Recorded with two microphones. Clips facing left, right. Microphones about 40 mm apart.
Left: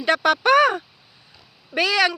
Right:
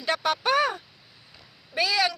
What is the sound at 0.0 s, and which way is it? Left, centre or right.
Speech, left.